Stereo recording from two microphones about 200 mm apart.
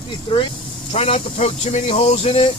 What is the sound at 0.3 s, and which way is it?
Speech, 25° left (ahead or behind).